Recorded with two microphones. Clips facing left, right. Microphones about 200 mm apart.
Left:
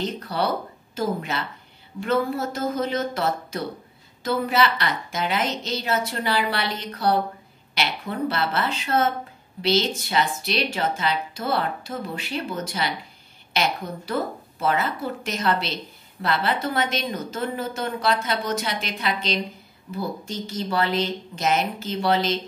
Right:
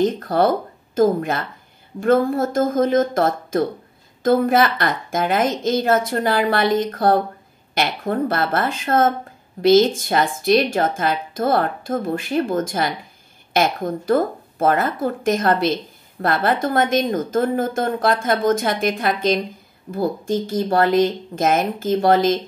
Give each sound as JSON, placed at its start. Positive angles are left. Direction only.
{"t": 0.0, "sound": "speech", "side_deg": -50}